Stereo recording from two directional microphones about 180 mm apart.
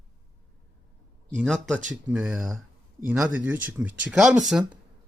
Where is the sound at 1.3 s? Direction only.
Centre (ahead or behind).